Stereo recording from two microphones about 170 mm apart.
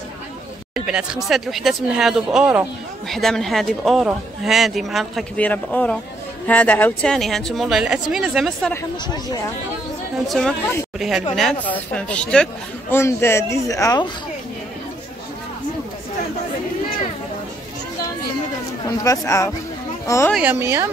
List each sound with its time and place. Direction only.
0.7 s a man's voice: 5° right (ahead or behind)
3.1 s a man's voice: centre (ahead or behind)
10.2 s a man's voice: centre (ahead or behind); by 14.1 s 20° left (ahead or behind)
18.9 s speech: 20° left (ahead or behind)
20.3 s speech: 10° right (ahead or behind)